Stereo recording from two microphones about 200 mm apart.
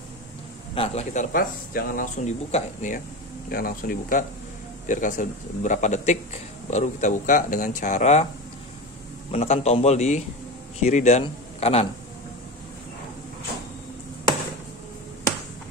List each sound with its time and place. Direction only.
0.7 s a man's voice: 30° left (ahead or behind)
1.3 s speech: 45° left (ahead or behind)
3.4 s a man's voice: 45° left (ahead or behind)
9.3 s a man's voice: 35° left (ahead or behind)